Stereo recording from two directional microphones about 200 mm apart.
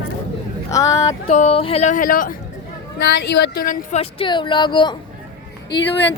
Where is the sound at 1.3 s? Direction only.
35° left (ahead or behind).